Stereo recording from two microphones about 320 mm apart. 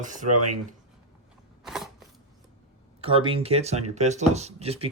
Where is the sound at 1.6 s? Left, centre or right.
Centre.